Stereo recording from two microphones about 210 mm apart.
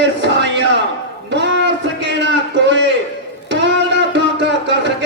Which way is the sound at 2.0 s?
55° right (ahead or behind).